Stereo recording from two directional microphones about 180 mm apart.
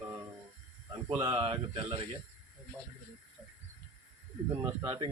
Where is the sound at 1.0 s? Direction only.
30° right (ahead or behind).